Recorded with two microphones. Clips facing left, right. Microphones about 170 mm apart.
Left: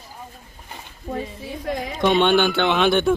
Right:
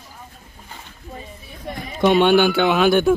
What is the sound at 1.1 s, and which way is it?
Speech, 90° left.